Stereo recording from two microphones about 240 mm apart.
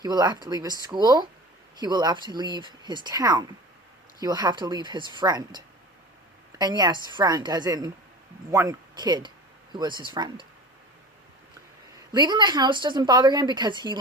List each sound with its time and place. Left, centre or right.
0.0 s speech: centre
12.1 s speech: centre